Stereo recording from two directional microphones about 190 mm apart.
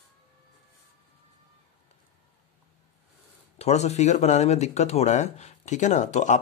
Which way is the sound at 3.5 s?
35° left (ahead or behind).